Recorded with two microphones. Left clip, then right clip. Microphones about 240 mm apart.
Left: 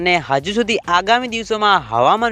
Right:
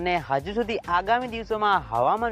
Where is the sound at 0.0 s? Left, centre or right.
Left.